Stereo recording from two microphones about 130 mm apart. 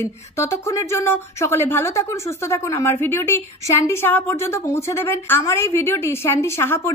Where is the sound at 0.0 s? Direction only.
20° left (ahead or behind).